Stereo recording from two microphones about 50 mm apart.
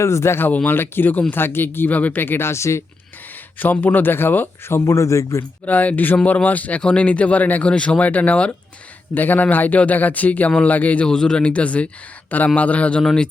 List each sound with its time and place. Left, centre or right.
0.0 s speech: left
0.5 s a man's voice: left
1.9 s a man's voice: left
2.2 s speech: left
2.5 s speech: left
3.6 s a man's voice: left
4.7 s speech: left
5.6 s a man's voice: left
9.1 s a man's voice: left
11.1 s speech: centre
13.0 s speech: centre